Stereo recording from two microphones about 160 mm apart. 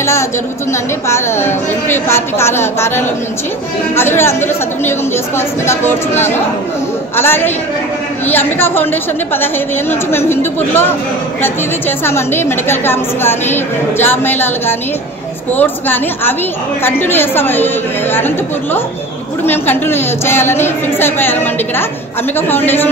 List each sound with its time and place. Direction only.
0.0 s a woman's voice: 15° left (ahead or behind)
12.0 s a woman's voice: 15° left (ahead or behind)